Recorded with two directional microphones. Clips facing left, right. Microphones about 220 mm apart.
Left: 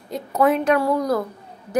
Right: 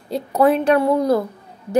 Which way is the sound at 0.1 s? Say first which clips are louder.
Right 3 dB; 35° right (ahead or behind).